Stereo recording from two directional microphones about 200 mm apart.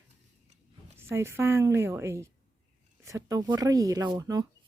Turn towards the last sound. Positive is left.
turn(degrees=-15)  # may be behind; listen again after turning